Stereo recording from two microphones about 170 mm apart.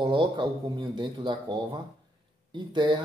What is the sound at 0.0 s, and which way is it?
Speech, 25° right (ahead or behind).